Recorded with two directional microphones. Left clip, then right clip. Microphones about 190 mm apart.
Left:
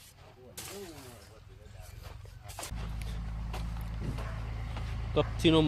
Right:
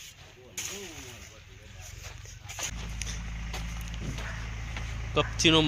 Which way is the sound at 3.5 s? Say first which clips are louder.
Right 3 dB; centre (ahead or behind).